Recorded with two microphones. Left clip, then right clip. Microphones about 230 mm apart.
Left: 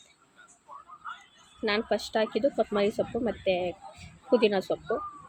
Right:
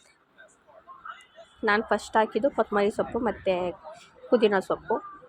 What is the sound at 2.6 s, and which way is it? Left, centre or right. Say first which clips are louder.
Speech: right 2 dB; centre.